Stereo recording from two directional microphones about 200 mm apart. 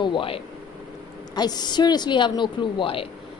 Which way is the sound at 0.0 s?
25° left (ahead or behind).